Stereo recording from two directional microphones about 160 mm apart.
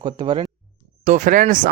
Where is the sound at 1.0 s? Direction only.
50° right (ahead or behind).